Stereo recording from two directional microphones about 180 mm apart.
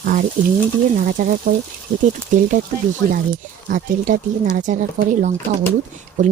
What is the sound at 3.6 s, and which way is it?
Speech, 45° right (ahead or behind).